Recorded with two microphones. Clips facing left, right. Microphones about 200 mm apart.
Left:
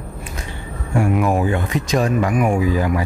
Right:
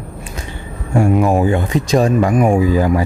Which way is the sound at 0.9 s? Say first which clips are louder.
Right 4 dB; 25° right (ahead or behind).